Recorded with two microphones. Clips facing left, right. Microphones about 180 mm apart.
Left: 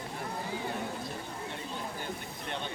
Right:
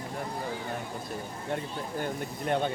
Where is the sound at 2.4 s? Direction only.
45° right (ahead or behind).